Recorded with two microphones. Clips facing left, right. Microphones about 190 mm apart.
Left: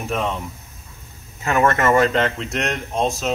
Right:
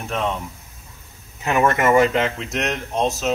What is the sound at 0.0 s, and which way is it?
Speech, 5° left (ahead or behind).